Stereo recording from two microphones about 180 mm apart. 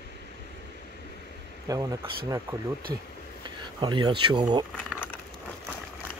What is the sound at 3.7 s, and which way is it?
Speech, 25° right (ahead or behind).